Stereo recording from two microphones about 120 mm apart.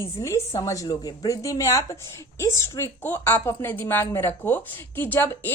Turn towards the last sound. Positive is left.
turn(degrees=15)  # may be behind; listen again after turning